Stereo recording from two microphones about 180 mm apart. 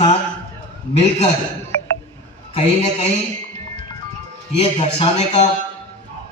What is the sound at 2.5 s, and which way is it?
Speech, 30° left (ahead or behind).